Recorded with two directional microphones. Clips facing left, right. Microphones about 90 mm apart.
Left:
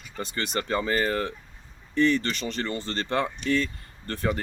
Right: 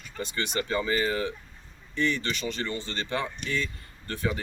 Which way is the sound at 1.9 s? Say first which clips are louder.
Left 5 dB; 40° left (ahead or behind).